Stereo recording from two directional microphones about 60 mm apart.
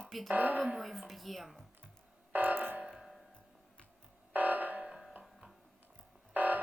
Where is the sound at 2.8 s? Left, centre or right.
Centre.